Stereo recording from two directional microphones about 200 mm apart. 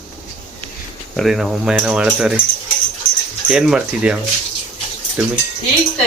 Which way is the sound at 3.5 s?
5° right (ahead or behind).